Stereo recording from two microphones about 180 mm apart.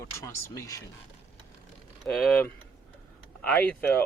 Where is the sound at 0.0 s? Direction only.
15° left (ahead or behind).